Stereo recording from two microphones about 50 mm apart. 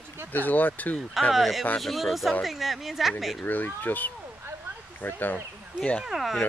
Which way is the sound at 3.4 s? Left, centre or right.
Left.